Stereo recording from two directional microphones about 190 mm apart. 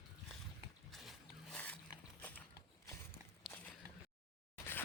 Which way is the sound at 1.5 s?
5° left (ahead or behind).